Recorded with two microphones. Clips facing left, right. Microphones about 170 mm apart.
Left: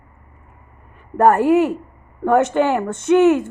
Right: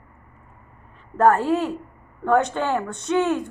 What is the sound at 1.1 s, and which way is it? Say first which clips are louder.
A woman's voice: left 5 dB; 15° left (ahead or behind).